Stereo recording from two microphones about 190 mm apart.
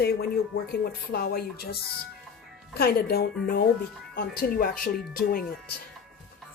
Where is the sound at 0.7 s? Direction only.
55° left (ahead or behind).